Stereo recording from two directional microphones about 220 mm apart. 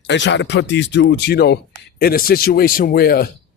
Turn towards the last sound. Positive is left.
turn(degrees=45)  # may be behind; listen again after turning